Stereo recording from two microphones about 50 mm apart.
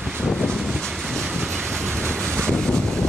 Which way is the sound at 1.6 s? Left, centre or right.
Right.